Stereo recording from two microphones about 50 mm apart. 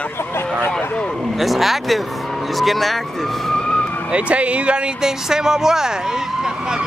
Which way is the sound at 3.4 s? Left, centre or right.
Centre.